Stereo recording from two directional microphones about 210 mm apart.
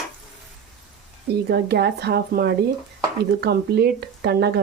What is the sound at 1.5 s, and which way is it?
Speech, 50° right (ahead or behind).